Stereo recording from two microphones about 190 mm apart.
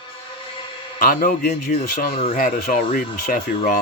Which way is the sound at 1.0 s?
50° left (ahead or behind).